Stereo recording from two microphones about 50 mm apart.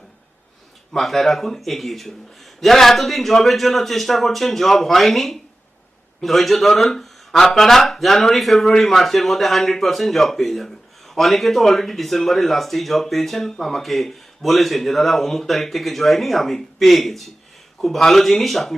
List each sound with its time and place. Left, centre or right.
0.9 s speech: centre